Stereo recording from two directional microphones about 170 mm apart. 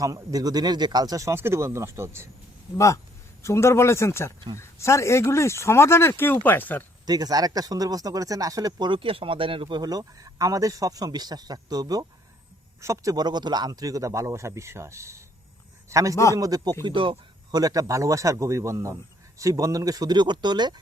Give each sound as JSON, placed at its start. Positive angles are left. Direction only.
{"t": 0.0, "sound": "speech", "side_deg": -20}
{"t": 2.7, "sound": "speech", "side_deg": 15}
{"t": 7.0, "sound": "speech", "side_deg": -25}